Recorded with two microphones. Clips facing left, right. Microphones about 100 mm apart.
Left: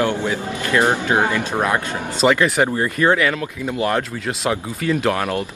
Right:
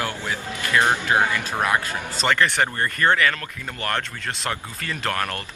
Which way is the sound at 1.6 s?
5° left (ahead or behind).